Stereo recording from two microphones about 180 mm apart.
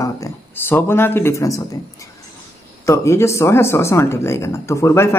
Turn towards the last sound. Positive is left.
turn(degrees=15)  # may be behind; listen again after turning